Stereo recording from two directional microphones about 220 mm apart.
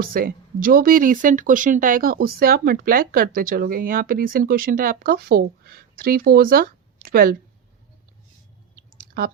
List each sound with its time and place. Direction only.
0.0 s speech: 40° right (ahead or behind)